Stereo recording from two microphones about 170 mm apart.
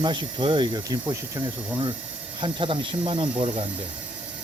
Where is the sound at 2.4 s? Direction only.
30° right (ahead or behind).